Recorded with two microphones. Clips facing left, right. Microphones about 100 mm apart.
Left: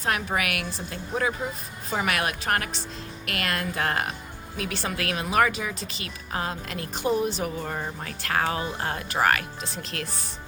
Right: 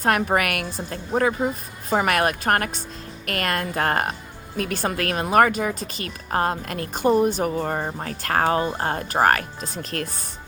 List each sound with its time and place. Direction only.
0.0 s speech: 50° right (ahead or behind)